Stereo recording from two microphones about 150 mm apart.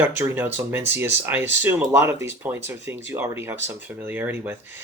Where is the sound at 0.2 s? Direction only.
15° right (ahead or behind).